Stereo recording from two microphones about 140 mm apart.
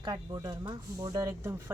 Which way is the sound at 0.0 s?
30° right (ahead or behind).